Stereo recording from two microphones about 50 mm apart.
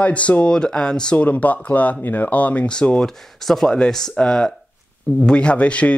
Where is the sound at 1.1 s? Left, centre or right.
Left.